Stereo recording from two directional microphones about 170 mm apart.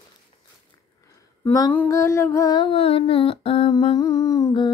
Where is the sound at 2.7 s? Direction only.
35° left (ahead or behind).